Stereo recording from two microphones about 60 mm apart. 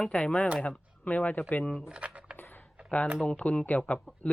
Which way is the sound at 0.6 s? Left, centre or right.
Left.